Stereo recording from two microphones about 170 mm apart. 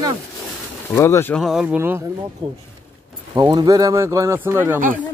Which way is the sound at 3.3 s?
20° right (ahead or behind).